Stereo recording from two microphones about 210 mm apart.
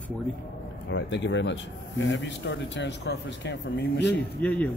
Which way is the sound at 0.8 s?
60° left (ahead or behind).